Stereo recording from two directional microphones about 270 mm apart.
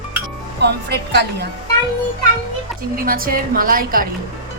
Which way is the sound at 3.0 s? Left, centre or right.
Right.